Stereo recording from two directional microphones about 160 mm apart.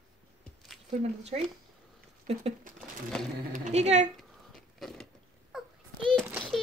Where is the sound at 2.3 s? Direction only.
40° right (ahead or behind).